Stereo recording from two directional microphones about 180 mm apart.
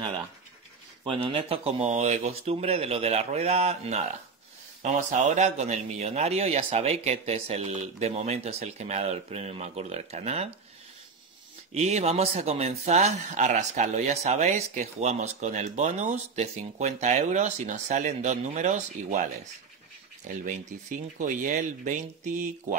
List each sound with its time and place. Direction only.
1.0 s speech: 30° right (ahead or behind)
11.7 s speech: 35° right (ahead or behind)
20.4 s speech: 45° right (ahead or behind)